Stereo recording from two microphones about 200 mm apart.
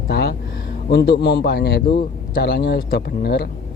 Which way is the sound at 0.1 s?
55° left (ahead or behind).